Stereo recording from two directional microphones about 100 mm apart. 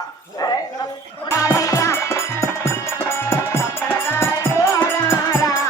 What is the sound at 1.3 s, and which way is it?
Music, 35° left (ahead or behind).